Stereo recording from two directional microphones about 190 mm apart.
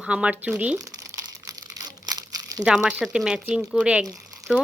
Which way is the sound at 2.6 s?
5° right (ahead or behind).